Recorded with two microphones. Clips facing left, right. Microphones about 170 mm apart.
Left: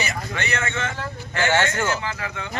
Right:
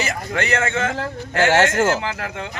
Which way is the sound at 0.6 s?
50° right (ahead or behind).